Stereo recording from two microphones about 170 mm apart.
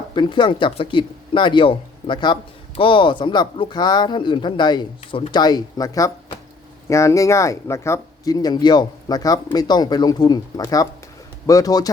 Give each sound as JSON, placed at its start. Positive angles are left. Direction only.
{"t": 0.1, "sound": "speech", "side_deg": 25}